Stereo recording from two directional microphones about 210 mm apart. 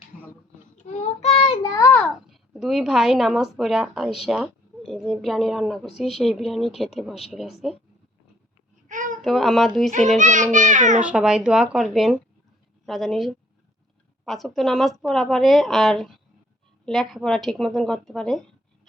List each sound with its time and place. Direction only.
0.9 s child singing: 30° left (ahead or behind)
1.9 s a child's voice: centre (ahead or behind)
8.9 s babbling: 35° right (ahead or behind)
9.2 s a woman's voice: centre (ahead or behind)
10.2 s a child's voice: 35° right (ahead or behind)
11.0 s a woman's voice: 5° right (ahead or behind)